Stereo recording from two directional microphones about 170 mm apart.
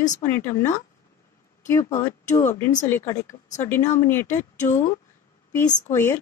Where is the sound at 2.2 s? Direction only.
45° left (ahead or behind).